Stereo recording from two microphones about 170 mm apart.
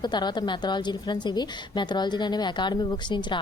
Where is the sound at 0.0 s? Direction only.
25° left (ahead or behind).